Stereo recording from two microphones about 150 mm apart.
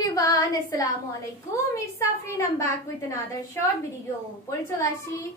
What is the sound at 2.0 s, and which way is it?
A woman's voice, 20° left (ahead or behind).